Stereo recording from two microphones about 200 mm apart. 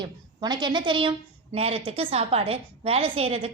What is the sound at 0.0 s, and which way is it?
A woman's voice, 20° right (ahead or behind).